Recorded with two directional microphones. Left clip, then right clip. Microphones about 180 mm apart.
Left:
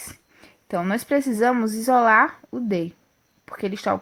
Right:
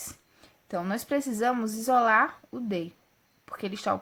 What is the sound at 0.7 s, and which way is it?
A woman's voice, 25° left (ahead or behind).